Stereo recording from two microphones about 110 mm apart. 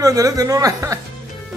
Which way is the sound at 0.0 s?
30° right (ahead or behind).